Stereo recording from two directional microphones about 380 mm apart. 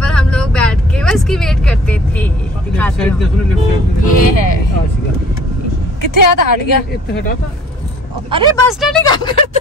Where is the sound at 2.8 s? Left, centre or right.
Centre.